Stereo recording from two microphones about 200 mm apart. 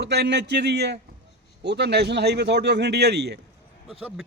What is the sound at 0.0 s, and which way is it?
Speech, 60° right (ahead or behind).